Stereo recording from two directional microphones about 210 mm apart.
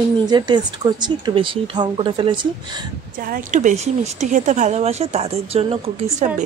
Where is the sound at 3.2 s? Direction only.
40° right (ahead or behind).